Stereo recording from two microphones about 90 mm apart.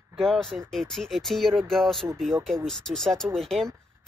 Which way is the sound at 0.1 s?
5° left (ahead or behind).